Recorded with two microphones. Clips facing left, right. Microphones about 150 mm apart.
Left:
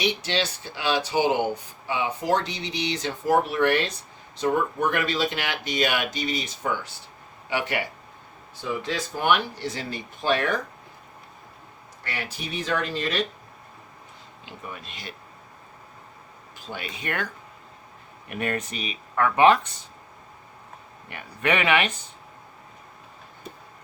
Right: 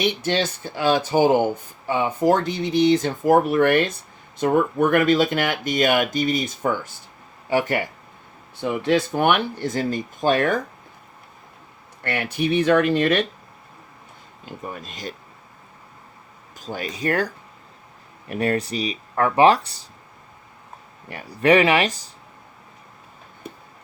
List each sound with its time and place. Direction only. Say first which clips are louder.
0.0 s speech: right 4 dB; 50° right (ahead or behind)
8.5 s speech: right 9 dB; 60° right (ahead or behind)
12.0 s speech: right 11 dB; 60° right (ahead or behind)
14.4 s speech: right 6 dB; 40° right (ahead or behind)
16.6 s speech: right 7 dB; 40° right (ahead or behind)
21.1 s speech: right 8 dB; 35° right (ahead or behind)